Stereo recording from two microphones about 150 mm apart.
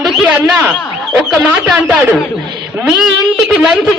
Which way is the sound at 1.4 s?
5° right (ahead or behind).